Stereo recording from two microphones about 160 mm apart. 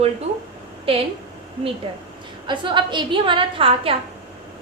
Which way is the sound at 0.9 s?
35° right (ahead or behind).